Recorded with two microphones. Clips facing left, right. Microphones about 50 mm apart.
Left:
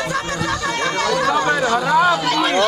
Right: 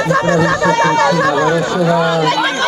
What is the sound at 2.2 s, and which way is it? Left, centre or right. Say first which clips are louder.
Speech: right 5 dB; right.